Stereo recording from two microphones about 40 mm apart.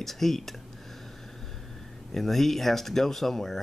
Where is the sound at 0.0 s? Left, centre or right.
Centre.